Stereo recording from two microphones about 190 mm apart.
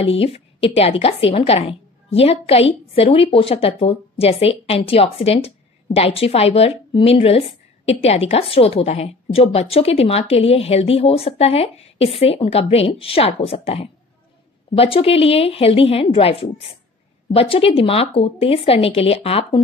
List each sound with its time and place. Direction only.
0.2 s a woman's voice: 30° left (ahead or behind)